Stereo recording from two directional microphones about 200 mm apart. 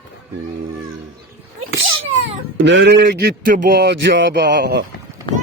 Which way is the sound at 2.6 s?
65° right (ahead or behind).